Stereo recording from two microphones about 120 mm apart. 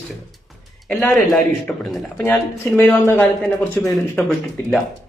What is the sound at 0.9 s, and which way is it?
Speech, 15° left (ahead or behind).